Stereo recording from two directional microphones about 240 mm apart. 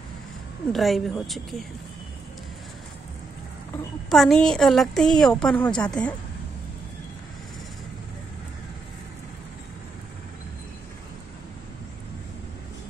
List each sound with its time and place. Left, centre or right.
0.7 s a woman's voice: centre
4.1 s a woman's voice: centre